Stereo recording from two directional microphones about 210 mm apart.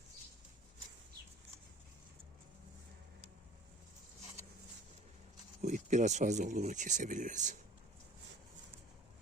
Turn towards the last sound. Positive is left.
turn(degrees=-35)  # may be behind; listen again after turning